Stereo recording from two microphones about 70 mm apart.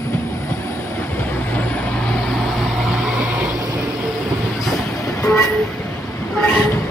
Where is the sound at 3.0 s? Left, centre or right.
Centre.